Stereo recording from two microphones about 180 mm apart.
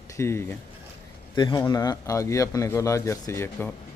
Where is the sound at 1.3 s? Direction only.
25° left (ahead or behind).